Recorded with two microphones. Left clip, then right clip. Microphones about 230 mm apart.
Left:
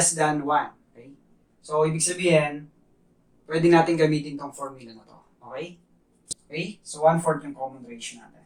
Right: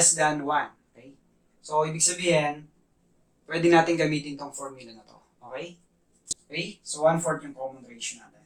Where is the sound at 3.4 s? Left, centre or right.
Right.